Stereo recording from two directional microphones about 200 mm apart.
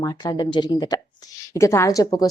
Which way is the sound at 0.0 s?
20° left (ahead or behind).